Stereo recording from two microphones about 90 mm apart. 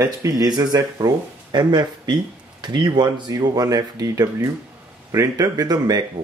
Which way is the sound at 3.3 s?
45° right (ahead or behind).